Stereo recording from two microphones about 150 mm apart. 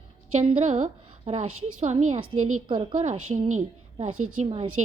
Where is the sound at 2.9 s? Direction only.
55° right (ahead or behind).